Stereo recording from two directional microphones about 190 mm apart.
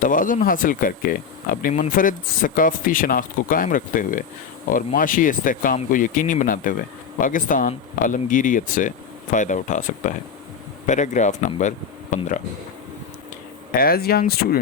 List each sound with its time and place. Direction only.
0.0 s speech: 45° left (ahead or behind)
13.7 s speech: 50° left (ahead or behind)